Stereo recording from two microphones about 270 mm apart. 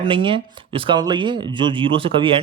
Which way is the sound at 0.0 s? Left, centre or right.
Centre.